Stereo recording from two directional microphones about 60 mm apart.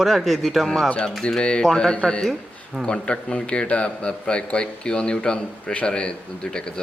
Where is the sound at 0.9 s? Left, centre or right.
Centre.